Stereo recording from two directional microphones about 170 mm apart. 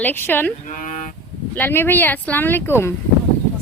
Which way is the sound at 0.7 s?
50° left (ahead or behind).